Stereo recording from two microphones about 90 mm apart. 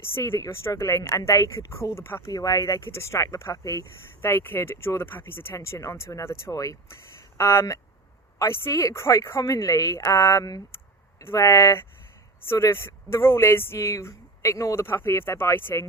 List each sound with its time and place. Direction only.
0.0 s speech: 25° left (ahead or behind)
2.3 s speech: 40° left (ahead or behind)